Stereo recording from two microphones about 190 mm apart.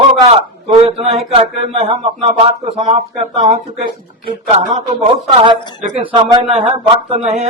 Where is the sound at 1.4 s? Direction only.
30° right (ahead or behind).